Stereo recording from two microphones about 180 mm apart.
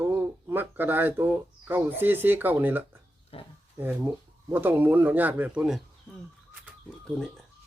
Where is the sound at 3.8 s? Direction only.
10° right (ahead or behind).